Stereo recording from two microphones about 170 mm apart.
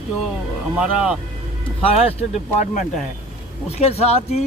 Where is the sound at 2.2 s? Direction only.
40° left (ahead or behind).